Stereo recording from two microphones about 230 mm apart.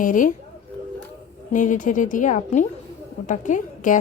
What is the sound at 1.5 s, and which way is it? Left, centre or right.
A woman's voice, left.